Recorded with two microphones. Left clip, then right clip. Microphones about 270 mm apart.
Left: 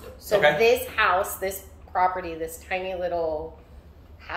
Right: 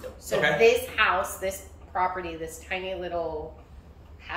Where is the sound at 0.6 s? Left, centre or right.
Centre.